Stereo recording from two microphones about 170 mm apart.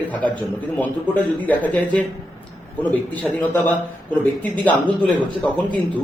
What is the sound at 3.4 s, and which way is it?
Speech, 10° left (ahead or behind).